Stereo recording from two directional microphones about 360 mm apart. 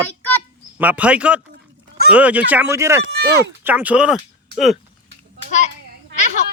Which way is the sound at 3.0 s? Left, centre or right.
Right.